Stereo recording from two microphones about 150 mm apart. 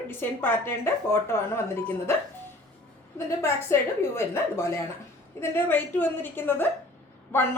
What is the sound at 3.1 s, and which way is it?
A woman's voice, 15° left (ahead or behind).